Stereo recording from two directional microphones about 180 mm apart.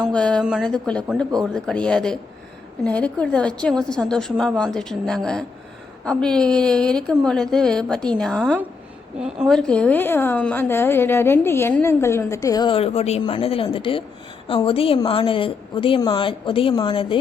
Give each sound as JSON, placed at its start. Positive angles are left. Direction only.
{"t": 0.1, "sound": "a woman's voice", "side_deg": 5}